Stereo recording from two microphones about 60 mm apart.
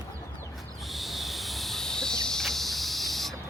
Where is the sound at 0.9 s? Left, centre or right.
Centre.